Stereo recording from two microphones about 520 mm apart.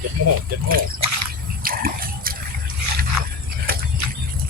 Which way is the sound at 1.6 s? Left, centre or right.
Centre.